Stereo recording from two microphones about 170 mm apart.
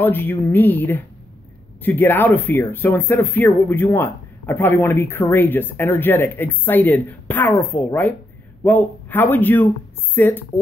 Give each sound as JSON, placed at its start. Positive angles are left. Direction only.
{"t": 0.0, "sound": "speech", "side_deg": 10}